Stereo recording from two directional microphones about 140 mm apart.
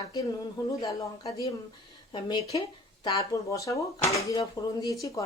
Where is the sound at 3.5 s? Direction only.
25° left (ahead or behind).